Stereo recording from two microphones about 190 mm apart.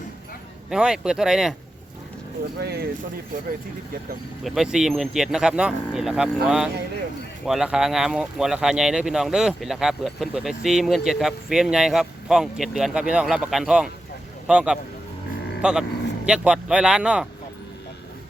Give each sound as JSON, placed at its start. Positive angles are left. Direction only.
{"t": 0.7, "sound": "speech", "side_deg": -5}
{"t": 2.6, "sound": "speech", "side_deg": -55}
{"t": 4.4, "sound": "speech", "side_deg": 0}